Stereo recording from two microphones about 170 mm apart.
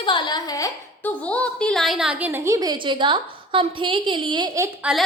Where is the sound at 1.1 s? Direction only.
10° left (ahead or behind); by 4.7 s 20° right (ahead or behind).